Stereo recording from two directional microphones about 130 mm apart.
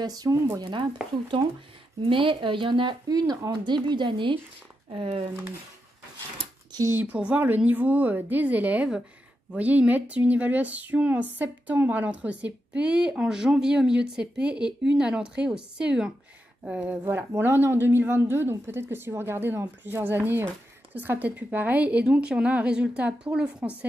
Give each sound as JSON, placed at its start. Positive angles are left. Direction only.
{"t": 0.0, "sound": "speech", "side_deg": -30}
{"t": 2.0, "sound": "speech", "side_deg": -40}
{"t": 6.7, "sound": "a sound", "side_deg": -25}
{"t": 7.0, "sound": "speech", "side_deg": -10}